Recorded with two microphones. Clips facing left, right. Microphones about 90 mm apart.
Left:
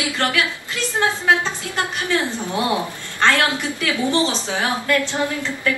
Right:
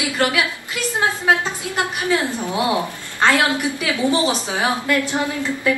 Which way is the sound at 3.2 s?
15° right (ahead or behind).